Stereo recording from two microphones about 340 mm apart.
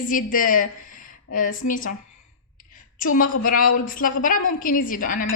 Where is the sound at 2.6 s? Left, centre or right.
Left.